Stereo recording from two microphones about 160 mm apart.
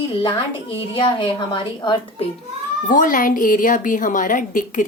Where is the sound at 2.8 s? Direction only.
55° left (ahead or behind).